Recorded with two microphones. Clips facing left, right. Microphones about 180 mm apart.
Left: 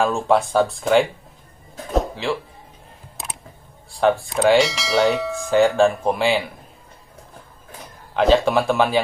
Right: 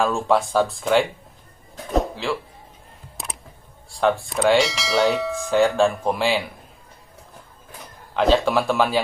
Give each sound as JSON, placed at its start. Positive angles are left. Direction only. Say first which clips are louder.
{"t": 0.0, "sound": "speech", "louder": "left 2 dB", "side_deg": 0}
{"t": 1.9, "sound": "a sound", "louder": "left 1 dB", "side_deg": 0}
{"t": 3.9, "sound": "speech", "louder": "left 2 dB", "side_deg": 0}
{"t": 8.2, "sound": "speech", "louder": "left 2 dB", "side_deg": 0}